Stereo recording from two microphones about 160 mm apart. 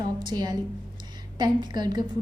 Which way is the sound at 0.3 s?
25° right (ahead or behind).